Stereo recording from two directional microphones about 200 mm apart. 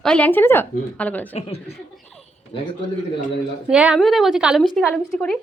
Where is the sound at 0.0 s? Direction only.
5° left (ahead or behind).